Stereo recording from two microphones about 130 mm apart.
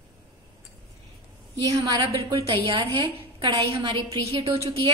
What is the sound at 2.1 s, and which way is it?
A woman's voice, 45° right (ahead or behind).